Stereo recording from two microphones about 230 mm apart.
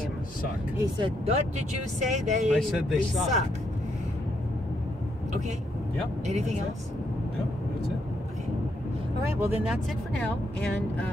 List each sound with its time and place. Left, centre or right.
0.7 s speech: right
2.5 s speech: centre
6.2 s speech: right
9.4 s speech: centre